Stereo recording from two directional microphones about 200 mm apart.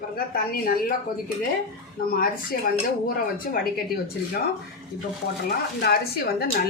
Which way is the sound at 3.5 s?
45° left (ahead or behind).